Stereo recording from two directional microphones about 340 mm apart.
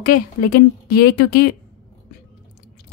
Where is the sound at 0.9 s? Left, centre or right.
Left.